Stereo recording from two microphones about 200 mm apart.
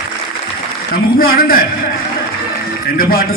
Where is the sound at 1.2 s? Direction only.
45° left (ahead or behind).